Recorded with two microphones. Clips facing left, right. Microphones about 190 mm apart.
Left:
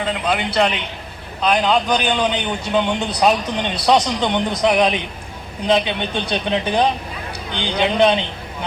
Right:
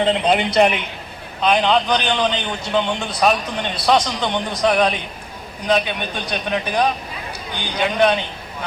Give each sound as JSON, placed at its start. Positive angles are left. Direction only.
{"t": 0.0, "sound": "speech", "side_deg": -25}
{"t": 1.4, "sound": "a man's voice", "side_deg": 5}